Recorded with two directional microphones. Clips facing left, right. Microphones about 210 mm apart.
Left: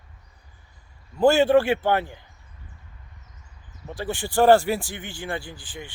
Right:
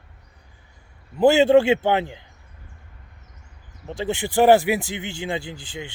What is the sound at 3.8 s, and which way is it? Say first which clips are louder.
Speech: right 4 dB; 25° right (ahead or behind).